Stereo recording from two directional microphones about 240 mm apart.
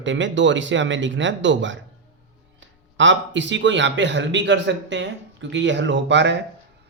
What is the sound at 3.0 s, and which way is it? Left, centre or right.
A man's voice, right.